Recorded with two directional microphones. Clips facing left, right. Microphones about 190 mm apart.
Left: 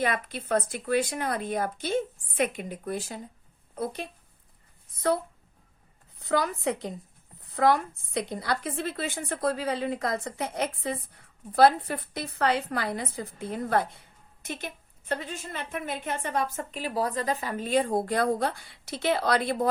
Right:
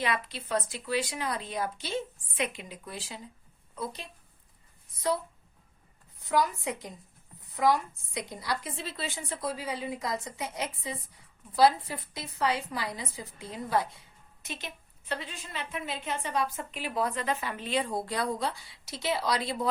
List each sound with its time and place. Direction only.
0.0 s a woman's voice: 50° left (ahead or behind)
6.2 s a woman's voice: 65° left (ahead or behind)